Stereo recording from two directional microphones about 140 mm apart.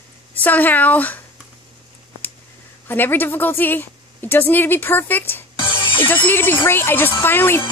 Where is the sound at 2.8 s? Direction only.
15° left (ahead or behind).